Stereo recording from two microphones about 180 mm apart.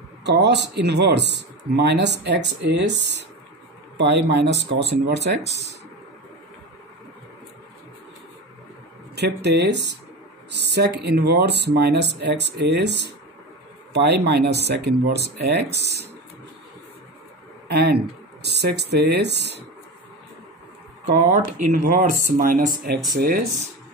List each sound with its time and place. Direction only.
0.2 s speech: 70° right (ahead or behind)
9.1 s speech: 70° right (ahead or behind)
17.6 s speech: 65° right (ahead or behind)
21.3 s speech: 50° right (ahead or behind)